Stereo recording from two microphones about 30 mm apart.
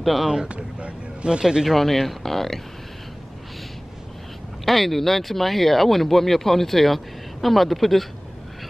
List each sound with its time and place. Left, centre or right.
0.0 s speech: centre
0.5 s a sound: right
1.4 s speech: centre
1.8 s speech: centre
4.6 s speech: centre